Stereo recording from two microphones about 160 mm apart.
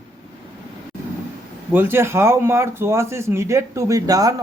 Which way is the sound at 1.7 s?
15° right (ahead or behind).